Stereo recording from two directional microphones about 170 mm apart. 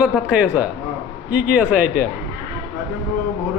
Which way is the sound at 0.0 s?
5° right (ahead or behind).